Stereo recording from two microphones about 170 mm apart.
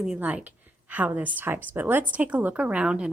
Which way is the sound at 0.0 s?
5° right (ahead or behind).